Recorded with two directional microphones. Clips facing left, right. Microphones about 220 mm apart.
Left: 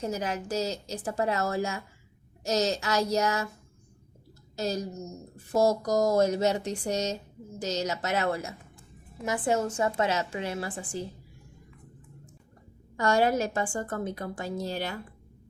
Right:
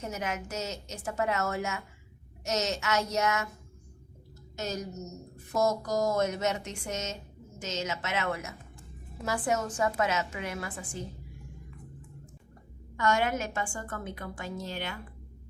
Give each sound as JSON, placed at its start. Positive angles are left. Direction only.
{"t": 0.0, "sound": "a woman's voice", "side_deg": 35}
{"t": 4.5, "sound": "a woman's voice", "side_deg": 35}
{"t": 9.2, "sound": "a woman's voice", "side_deg": 20}
{"t": 13.0, "sound": "a woman's voice", "side_deg": 35}